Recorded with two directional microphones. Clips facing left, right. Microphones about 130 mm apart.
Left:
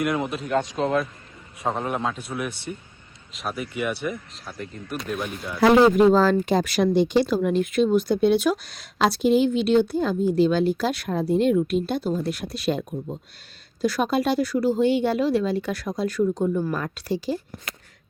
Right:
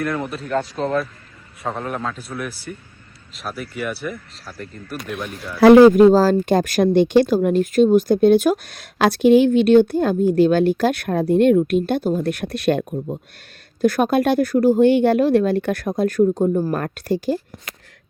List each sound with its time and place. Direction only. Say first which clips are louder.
0.0 s a man's voice: even; 15° left (ahead or behind)
0.3 s speech: right 1 dB; centre (ahead or behind)
1.6 s a man's voice: even; 20° left (ahead or behind)
3.3 s speech: even; centre (ahead or behind)
6.1 s speech: right 4 dB; 40° right (ahead or behind); by 7.3 s 55° right (ahead or behind)
7.4 s speech: right 5 dB; 45° right (ahead or behind)